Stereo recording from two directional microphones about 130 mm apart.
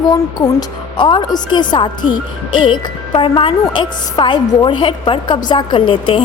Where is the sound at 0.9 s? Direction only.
35° left (ahead or behind).